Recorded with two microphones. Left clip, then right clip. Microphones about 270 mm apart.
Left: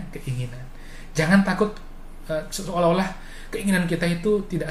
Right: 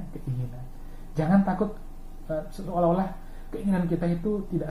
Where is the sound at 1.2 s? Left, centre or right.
Left.